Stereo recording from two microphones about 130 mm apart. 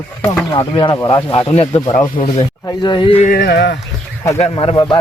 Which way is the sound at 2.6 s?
35° left (ahead or behind).